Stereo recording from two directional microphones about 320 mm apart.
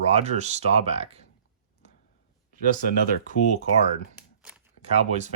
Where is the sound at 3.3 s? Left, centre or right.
Left.